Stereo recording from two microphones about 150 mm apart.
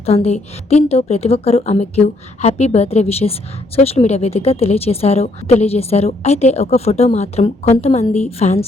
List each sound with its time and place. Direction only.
0.0 s speech: 40° left (ahead or behind)